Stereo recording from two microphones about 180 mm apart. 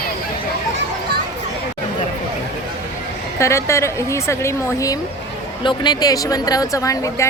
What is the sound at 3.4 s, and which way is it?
A woman's voice, 15° left (ahead or behind).